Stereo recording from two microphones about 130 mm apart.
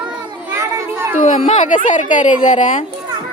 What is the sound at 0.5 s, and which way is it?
Children playing, 20° right (ahead or behind).